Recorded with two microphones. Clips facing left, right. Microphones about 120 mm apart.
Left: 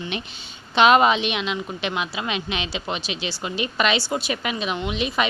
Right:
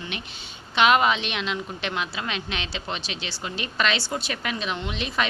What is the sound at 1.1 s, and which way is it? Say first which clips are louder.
Speech: left 4 dB; 10° left (ahead or behind).